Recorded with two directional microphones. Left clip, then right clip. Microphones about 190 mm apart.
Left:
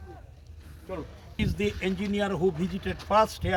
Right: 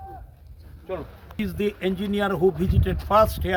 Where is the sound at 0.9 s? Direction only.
10° right (ahead or behind).